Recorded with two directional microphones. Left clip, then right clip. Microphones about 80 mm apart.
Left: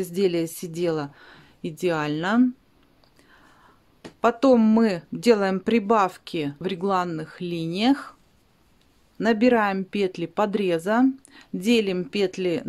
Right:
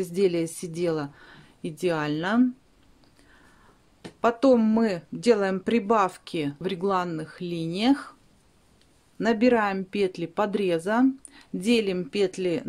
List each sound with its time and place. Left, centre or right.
0.0 s speech: left
4.2 s speech: left
9.2 s speech: left